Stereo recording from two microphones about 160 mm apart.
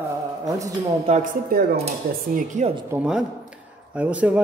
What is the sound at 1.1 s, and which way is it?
Speech, 40° right (ahead or behind).